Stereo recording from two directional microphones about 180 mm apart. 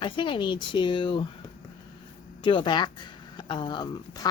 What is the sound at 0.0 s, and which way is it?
A woman's voice, 25° left (ahead or behind).